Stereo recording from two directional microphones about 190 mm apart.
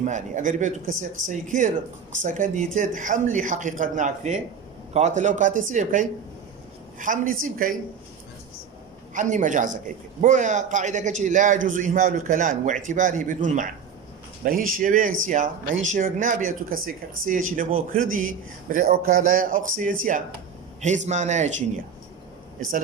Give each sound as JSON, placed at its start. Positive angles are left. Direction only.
{"t": 0.0, "sound": "a man's voice", "side_deg": -40}
{"t": 9.1, "sound": "a man's voice", "side_deg": -40}